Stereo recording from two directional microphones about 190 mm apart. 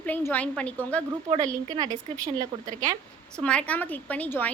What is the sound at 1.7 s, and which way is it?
Speech, 20° right (ahead or behind).